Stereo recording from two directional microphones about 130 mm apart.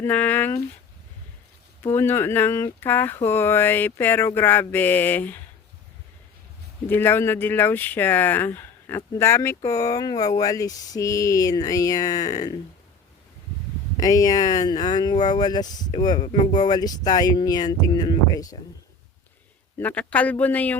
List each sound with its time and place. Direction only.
0.0 s speech: 15° left (ahead or behind)
1.8 s a sound: 20° left (ahead or behind)
3.2 s speech: 15° left (ahead or behind)
6.8 s speech: 15° left (ahead or behind)
9.6 s a sound: 25° left (ahead or behind)
13.9 s speech: 30° left (ahead or behind)
19.8 s speech: 10° left (ahead or behind)